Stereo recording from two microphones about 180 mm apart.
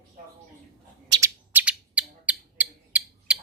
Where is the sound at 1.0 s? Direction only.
20° right (ahead or behind).